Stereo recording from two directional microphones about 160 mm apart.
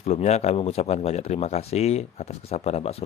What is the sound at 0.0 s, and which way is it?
Speech, 40° left (ahead or behind).